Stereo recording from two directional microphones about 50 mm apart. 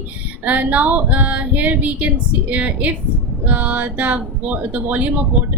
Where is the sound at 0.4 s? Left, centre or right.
Right.